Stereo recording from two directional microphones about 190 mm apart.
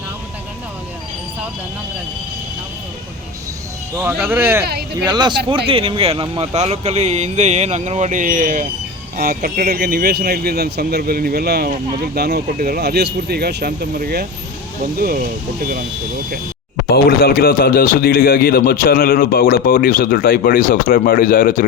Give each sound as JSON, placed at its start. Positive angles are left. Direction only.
{"t": 3.9, "sound": "speech", "side_deg": -5}
{"t": 4.6, "sound": "speech", "side_deg": -55}
{"t": 5.0, "sound": "speech", "side_deg": -20}
{"t": 16.9, "sound": "a man's voice", "side_deg": 50}